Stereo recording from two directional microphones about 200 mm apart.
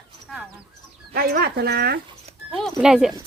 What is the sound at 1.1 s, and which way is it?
Speech, 50° right (ahead or behind).